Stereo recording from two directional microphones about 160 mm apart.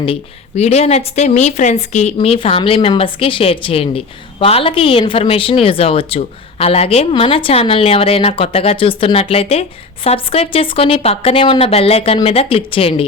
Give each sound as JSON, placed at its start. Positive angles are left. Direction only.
{"t": 0.0, "sound": "speech", "side_deg": 40}
{"t": 2.1, "sound": "a woman's voice", "side_deg": 35}